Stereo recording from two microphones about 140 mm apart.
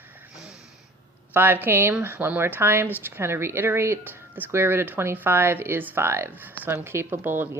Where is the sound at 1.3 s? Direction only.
15° right (ahead or behind).